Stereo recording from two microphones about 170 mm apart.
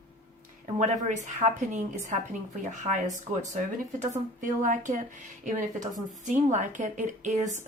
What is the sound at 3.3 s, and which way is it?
Speech, 40° right (ahead or behind).